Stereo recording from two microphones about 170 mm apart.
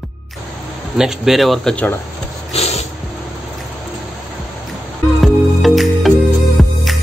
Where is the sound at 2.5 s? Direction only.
40° left (ahead or behind).